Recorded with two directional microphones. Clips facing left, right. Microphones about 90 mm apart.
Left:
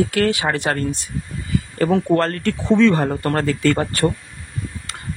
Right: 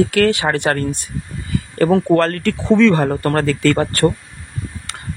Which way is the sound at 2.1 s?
90° right.